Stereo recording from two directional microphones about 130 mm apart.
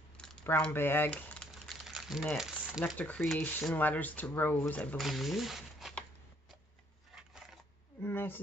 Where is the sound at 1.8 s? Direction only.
Centre (ahead or behind).